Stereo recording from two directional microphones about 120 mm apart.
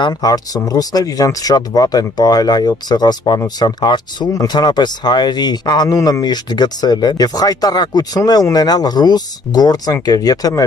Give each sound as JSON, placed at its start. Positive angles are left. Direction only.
{"t": 0.0, "sound": "speech", "side_deg": 35}